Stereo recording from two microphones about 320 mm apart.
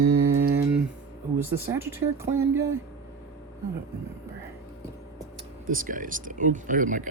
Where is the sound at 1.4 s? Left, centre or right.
Centre.